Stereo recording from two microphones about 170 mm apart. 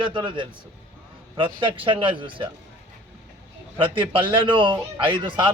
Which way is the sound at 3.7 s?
30° right (ahead or behind).